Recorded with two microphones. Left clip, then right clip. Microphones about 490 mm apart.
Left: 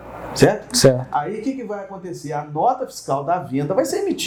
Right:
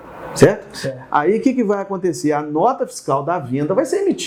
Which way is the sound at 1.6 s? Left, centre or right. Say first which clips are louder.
Right 10 dB; right.